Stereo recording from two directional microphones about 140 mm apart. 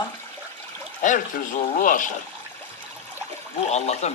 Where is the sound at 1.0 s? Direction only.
65° left (ahead or behind).